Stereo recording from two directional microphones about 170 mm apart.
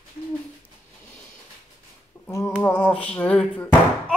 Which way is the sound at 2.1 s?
10° left (ahead or behind).